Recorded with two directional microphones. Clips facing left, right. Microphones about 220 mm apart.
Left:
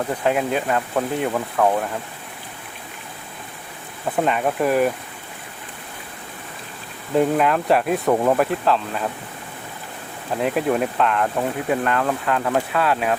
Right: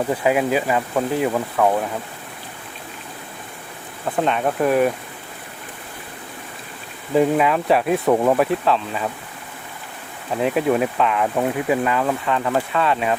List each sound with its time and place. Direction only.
0.1 s speech: 5° right (ahead or behind)
4.2 s speech: 5° left (ahead or behind)
7.1 s speech: centre (ahead or behind)
10.3 s speech: centre (ahead or behind)